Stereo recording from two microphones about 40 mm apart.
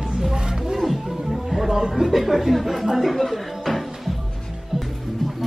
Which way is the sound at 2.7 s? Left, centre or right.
Centre.